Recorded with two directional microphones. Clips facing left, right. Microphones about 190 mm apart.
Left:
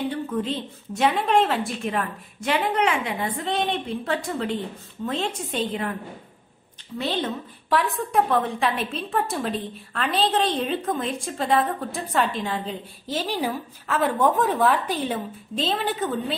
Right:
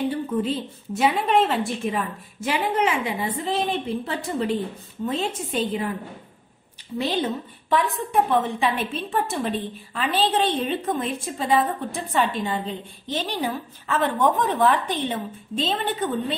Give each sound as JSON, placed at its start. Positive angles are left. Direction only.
{"t": 0.1, "sound": "a woman's voice", "side_deg": -5}
{"t": 7.0, "sound": "speech", "side_deg": -10}
{"t": 7.7, "sound": "a woman's voice", "side_deg": 0}